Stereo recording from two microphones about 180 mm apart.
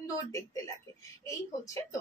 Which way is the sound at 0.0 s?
15° left (ahead or behind).